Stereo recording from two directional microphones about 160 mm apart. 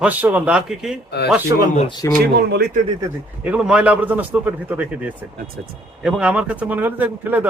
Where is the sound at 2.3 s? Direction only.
90° right.